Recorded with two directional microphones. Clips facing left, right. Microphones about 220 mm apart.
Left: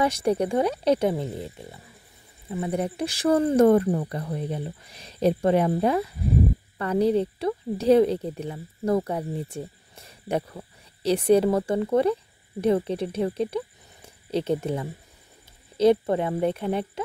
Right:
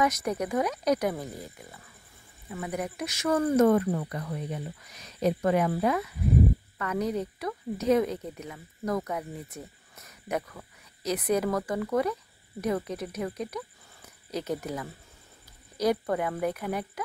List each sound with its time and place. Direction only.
0.0 s speech: 30° left (ahead or behind)